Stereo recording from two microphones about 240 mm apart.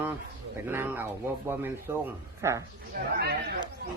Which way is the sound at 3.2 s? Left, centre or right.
Right.